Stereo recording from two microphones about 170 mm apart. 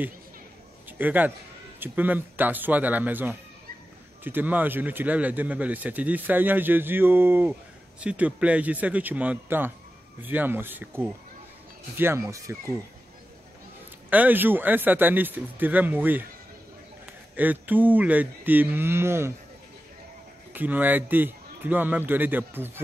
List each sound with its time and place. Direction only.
0.8 s a man's voice: 10° right (ahead or behind)
14.1 s speech: 10° right (ahead or behind)
17.4 s speech: 10° right (ahead or behind)
20.5 s speech: 10° right (ahead or behind)